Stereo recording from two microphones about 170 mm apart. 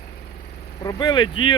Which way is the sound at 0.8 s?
25° left (ahead or behind).